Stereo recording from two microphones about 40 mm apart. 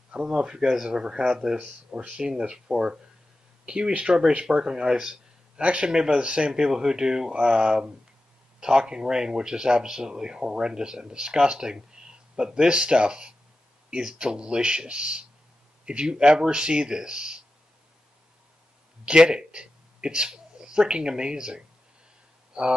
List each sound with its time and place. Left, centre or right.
0.4 s speech: right
6.6 s speech: centre
19.0 s speech: right